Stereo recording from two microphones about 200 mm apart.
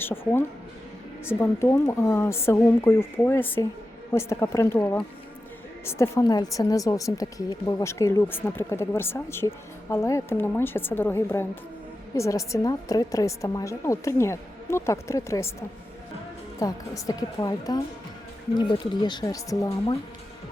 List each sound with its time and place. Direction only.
0.0 s speech: 10° left (ahead or behind)
16.6 s speech: 15° left (ahead or behind)